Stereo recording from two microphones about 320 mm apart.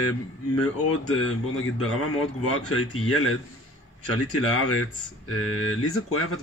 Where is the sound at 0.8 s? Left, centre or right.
Left.